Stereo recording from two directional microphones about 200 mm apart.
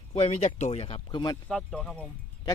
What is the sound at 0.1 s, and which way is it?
Speech, 30° left (ahead or behind).